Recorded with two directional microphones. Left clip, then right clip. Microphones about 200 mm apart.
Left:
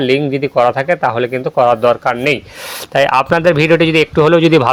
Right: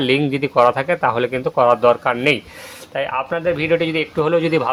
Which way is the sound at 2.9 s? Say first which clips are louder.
Left 10 dB; 50° left (ahead or behind).